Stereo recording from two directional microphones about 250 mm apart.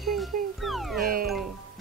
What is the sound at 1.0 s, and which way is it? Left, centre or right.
Music, right.